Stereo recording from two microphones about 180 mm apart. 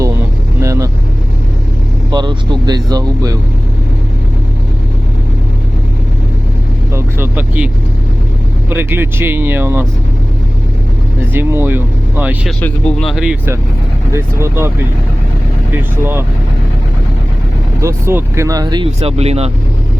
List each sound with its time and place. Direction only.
0.6 s vehicle: 15° right (ahead or behind)
2.0 s speech: 25° right (ahead or behind)
6.9 s vehicle: 10° right (ahead or behind)
8.7 s speech: 10° right (ahead or behind)
11.3 s speech: 10° right (ahead or behind)
12.5 s speech: 5° left (ahead or behind)
14.1 s speech: 15° right (ahead or behind)
15.7 s speech: 10° right (ahead or behind)
17.7 s speech: 15° right (ahead or behind)
18.9 s speech: 35° right (ahead or behind)